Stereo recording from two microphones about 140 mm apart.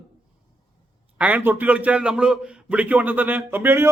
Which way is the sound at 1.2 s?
10° right (ahead or behind).